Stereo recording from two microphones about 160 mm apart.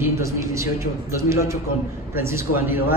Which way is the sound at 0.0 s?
20° right (ahead or behind).